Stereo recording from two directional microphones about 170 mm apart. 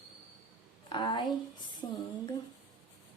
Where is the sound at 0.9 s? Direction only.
25° left (ahead or behind).